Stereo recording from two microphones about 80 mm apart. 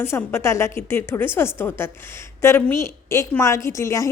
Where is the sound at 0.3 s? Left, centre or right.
Left.